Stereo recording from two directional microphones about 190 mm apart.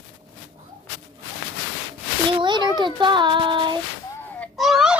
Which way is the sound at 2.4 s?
25° right (ahead or behind).